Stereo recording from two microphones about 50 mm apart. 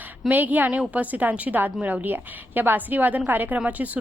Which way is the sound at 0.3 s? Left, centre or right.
Right.